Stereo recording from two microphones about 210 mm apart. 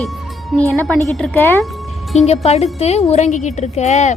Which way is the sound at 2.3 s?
30° left (ahead or behind).